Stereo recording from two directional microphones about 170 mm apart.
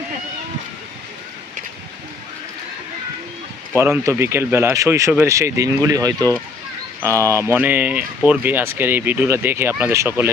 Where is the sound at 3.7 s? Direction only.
15° right (ahead or behind).